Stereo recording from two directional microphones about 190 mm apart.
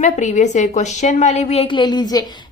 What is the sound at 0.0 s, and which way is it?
A woman's voice, 40° left (ahead or behind).